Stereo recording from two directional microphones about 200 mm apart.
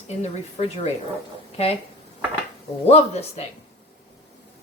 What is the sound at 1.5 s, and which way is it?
Speech, 30° left (ahead or behind).